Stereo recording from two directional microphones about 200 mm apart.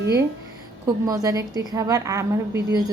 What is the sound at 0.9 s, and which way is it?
A woman's voice, 20° right (ahead or behind).